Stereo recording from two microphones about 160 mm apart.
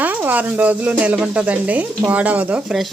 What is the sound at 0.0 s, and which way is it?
Speech, 10° right (ahead or behind).